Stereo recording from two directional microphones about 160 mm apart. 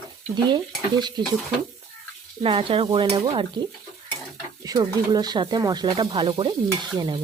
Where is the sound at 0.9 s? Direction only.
25° right (ahead or behind).